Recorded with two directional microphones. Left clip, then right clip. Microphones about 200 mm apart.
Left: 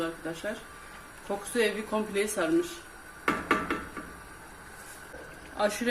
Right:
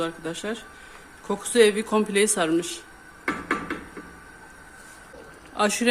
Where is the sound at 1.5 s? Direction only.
45° right (ahead or behind).